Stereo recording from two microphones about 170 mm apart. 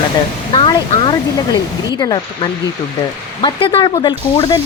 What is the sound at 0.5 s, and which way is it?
Speech, 30° left (ahead or behind).